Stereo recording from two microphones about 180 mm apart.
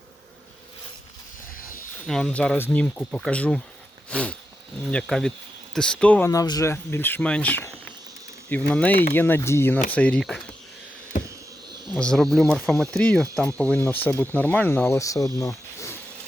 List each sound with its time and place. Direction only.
2.0 s speech: 5° left (ahead or behind)
11.1 s a sound: 45° left (ahead or behind)
11.9 s speech: 5° left (ahead or behind)